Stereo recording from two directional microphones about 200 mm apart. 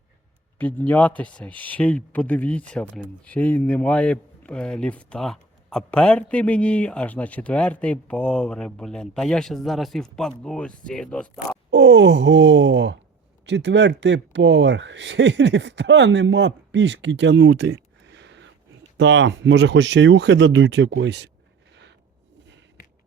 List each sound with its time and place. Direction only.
0.6 s speech: 10° left (ahead or behind)
2.8 s speech: 5° right (ahead or behind)
3.2 s a man's voice: 5° left (ahead or behind)
11.7 s speech: 60° right (ahead or behind)